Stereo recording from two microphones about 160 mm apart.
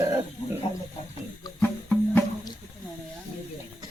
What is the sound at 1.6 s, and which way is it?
Music, 10° left (ahead or behind).